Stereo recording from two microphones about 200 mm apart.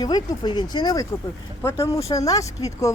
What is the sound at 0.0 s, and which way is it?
Speech, 20° left (ahead or behind).